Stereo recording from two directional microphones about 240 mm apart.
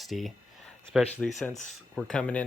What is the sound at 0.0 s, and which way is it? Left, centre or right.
Speech, centre.